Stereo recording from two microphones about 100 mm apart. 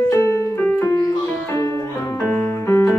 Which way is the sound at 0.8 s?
35° left (ahead or behind).